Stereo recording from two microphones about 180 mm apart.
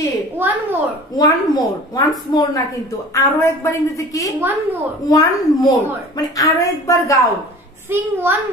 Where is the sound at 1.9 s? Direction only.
20° left (ahead or behind).